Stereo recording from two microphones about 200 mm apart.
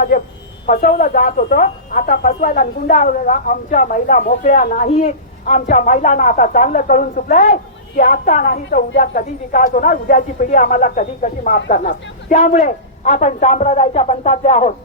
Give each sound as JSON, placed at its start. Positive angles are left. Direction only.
{"t": 0.1, "sound": "speech", "side_deg": 40}